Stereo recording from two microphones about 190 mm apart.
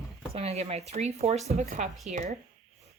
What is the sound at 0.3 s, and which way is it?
Speech, 35° right (ahead or behind).